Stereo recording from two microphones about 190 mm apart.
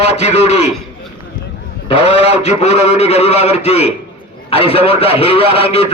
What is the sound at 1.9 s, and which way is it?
A man's voice, 30° left (ahead or behind).